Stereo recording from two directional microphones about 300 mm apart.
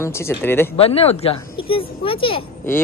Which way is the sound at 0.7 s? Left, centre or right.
Centre.